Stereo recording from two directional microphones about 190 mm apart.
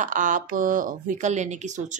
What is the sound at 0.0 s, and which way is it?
Speech, 45° right (ahead or behind).